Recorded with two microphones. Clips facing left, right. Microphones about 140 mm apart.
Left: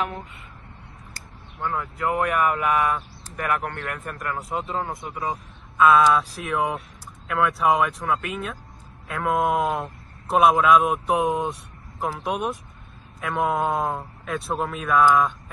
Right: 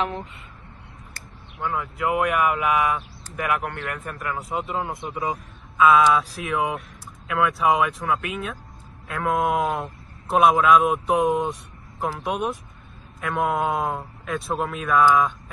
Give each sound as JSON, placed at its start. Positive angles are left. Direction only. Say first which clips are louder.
{"t": 1.6, "sound": "speech", "louder": "right 1 dB", "side_deg": -5}
{"t": 4.8, "sound": "speech", "louder": "right 2 dB", "side_deg": -20}
{"t": 5.8, "sound": "speech", "louder": "even", "side_deg": 0}